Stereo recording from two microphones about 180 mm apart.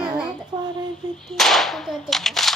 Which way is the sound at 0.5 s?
25° right (ahead or behind).